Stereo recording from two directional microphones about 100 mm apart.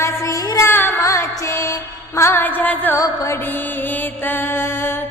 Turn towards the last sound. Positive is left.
turn(degrees=35)  # may be behind; listen again after turning